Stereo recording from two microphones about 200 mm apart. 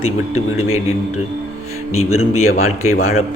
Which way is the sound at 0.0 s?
90° left.